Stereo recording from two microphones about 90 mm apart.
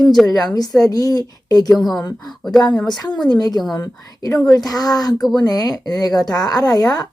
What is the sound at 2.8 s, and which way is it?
Speech, 50° left (ahead or behind).